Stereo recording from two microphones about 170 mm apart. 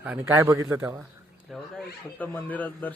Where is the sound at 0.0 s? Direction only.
10° right (ahead or behind).